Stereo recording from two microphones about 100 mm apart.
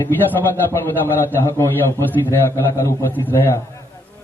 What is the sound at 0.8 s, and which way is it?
A man's voice, 25° left (ahead or behind).